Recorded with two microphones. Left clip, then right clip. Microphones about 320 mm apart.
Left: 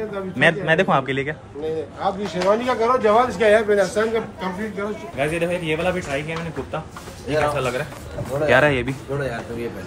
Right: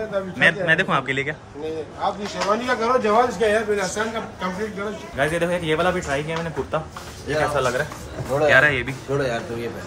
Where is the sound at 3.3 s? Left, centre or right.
Centre.